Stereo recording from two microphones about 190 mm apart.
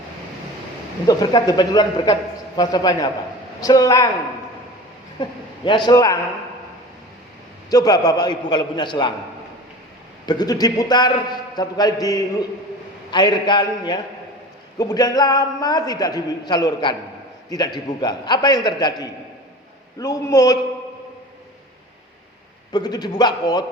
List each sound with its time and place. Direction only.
1.0 s a man's voice: 20° left (ahead or behind)
5.2 s a man's voice: 25° left (ahead or behind)
7.7 s a man's voice: 20° left (ahead or behind)
10.2 s a man's voice: 20° left (ahead or behind)
22.7 s a man's voice: 20° left (ahead or behind)